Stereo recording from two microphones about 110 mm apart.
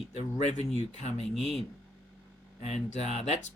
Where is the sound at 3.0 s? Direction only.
85° left.